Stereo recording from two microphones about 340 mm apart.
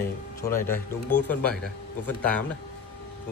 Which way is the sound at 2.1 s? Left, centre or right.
Centre.